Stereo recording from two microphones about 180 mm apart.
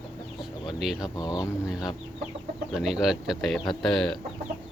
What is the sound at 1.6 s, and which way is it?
Speech, 5° right (ahead or behind).